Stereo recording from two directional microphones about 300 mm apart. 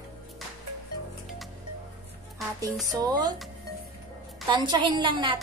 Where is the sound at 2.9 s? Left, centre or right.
Centre.